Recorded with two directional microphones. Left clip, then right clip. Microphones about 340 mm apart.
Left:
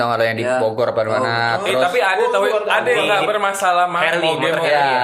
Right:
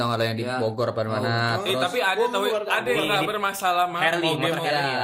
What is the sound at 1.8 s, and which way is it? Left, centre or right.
A man's voice, right.